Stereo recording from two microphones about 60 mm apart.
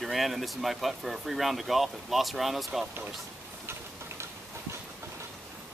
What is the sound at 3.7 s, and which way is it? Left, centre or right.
Tick-tock, right.